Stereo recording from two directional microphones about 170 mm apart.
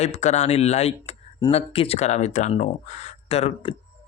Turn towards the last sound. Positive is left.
turn(degrees=35)  # may be behind; listen again after turning